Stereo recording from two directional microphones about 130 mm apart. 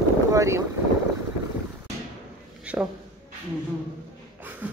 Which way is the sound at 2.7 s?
10° right (ahead or behind).